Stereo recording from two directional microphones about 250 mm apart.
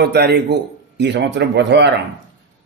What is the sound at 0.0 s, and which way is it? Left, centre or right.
A man's voice, right.